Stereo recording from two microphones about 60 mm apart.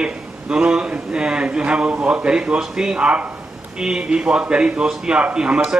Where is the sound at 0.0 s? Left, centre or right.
Centre.